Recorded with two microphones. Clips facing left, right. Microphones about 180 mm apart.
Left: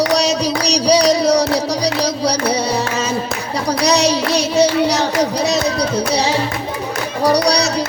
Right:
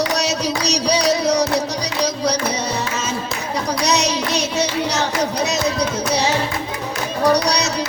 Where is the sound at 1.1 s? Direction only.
35° left (ahead or behind).